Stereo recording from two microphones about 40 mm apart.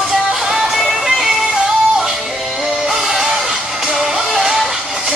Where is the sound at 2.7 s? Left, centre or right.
Centre.